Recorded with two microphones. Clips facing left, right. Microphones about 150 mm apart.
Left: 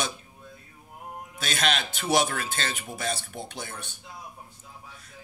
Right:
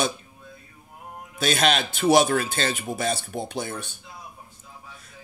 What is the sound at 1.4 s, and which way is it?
Speech, 30° right (ahead or behind).